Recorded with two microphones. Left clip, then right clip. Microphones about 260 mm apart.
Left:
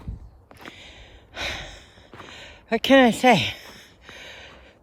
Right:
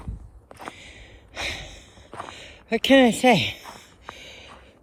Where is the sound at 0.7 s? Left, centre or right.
Centre.